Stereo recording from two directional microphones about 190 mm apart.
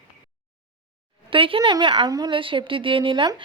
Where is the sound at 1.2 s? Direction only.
30° right (ahead or behind).